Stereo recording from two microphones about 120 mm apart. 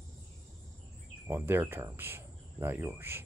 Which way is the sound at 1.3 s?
20° right (ahead or behind).